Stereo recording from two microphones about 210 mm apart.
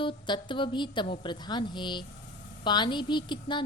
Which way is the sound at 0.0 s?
25° left (ahead or behind).